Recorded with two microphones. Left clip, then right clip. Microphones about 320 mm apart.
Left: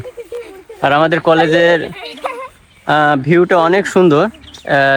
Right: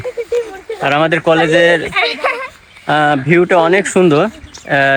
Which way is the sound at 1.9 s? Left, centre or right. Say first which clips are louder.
Right 9 dB; centre.